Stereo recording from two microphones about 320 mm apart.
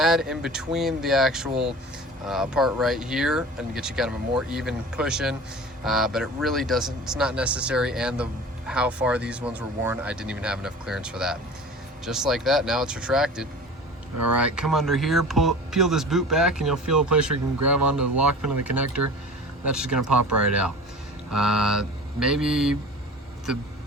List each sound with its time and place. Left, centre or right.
0.0 s speech: centre
21.2 s mantra: centre